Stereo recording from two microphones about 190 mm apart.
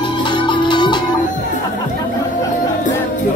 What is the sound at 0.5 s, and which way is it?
Music, 25° left (ahead or behind).